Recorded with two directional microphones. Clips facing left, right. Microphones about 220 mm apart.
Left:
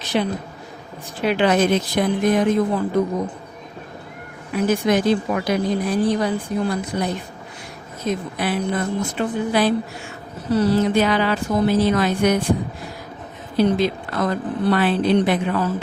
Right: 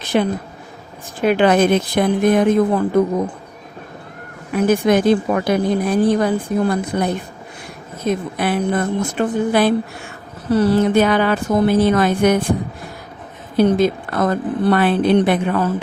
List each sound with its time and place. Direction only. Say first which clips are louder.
0.1 s a woman's voice: right 4 dB; 50° right (ahead or behind)
4.5 s a woman's voice: right 4 dB; 55° right (ahead or behind)
13.6 s a woman's voice: right 4 dB; 50° right (ahead or behind)